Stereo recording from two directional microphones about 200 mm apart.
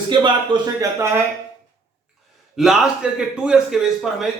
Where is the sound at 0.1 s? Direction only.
20° right (ahead or behind).